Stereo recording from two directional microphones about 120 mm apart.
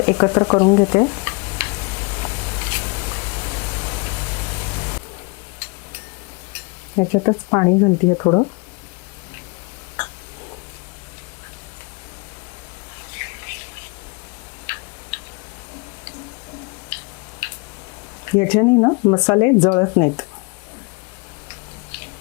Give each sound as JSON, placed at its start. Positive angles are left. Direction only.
{"t": 0.0, "sound": "stir", "side_deg": 20}
{"t": 6.9, "sound": "speech", "side_deg": 25}
{"t": 13.1, "sound": "a sound", "side_deg": 20}
{"t": 15.1, "sound": "tick", "side_deg": 10}
{"t": 18.3, "sound": "speech", "side_deg": 20}
{"t": 21.5, "sound": "tick-tock", "side_deg": 15}